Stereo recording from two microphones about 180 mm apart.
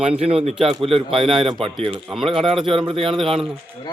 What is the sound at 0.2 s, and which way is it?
A man's voice, 35° right (ahead or behind).